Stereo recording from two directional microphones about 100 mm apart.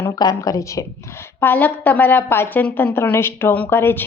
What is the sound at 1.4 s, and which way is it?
A woman's voice, 20° left (ahead or behind).